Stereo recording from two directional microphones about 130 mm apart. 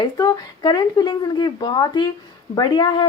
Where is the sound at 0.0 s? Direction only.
30° left (ahead or behind).